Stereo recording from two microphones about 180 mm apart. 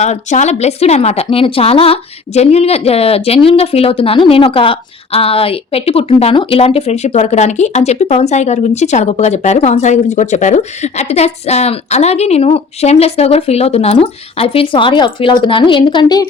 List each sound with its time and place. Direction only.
0.0 s a woman's voice: 40° left (ahead or behind); by 16.2 s 25° left (ahead or behind)